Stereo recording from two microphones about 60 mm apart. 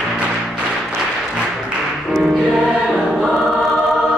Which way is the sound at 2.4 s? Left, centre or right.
Centre.